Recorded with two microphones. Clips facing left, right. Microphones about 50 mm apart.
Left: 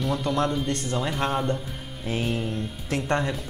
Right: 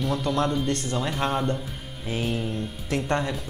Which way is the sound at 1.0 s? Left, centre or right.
Centre.